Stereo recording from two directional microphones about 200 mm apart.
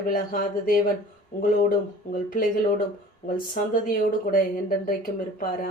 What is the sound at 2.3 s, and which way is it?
Speech, 45° left (ahead or behind).